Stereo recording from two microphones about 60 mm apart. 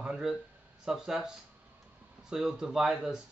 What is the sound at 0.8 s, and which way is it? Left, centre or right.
Speech, centre.